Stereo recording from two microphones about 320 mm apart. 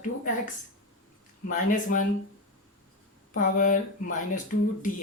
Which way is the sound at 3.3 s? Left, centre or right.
Left.